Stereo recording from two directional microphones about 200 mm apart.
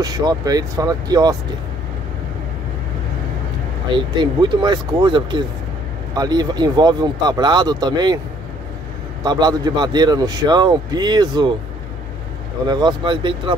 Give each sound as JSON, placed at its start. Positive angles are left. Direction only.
{"t": 0.0, "sound": "a man's voice", "side_deg": -20}
{"t": 3.9, "sound": "a man's voice", "side_deg": -20}
{"t": 9.2, "sound": "a man's voice", "side_deg": -20}
{"t": 12.6, "sound": "a man's voice", "side_deg": -20}